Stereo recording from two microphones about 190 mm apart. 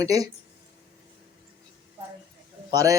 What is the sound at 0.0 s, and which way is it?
Speech, 20° right (ahead or behind).